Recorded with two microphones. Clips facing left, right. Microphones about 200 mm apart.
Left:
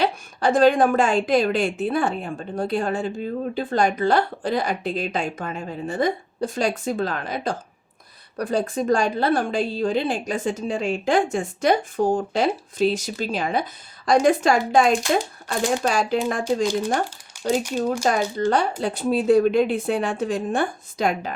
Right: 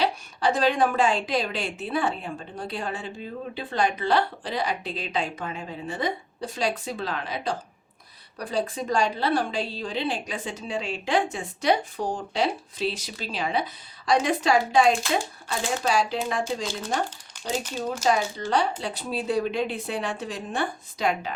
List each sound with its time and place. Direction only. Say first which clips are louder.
0.0 s a woman's voice: left 3 dB; 50° left (ahead or behind)
17.4 s speech: left 7 dB; 10° left (ahead or behind)
18.0 s a woman's voice: left 3 dB; 50° left (ahead or behind)